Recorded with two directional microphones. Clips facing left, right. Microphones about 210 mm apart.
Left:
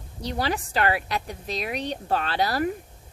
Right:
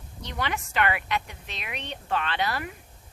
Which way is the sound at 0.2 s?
35° left (ahead or behind).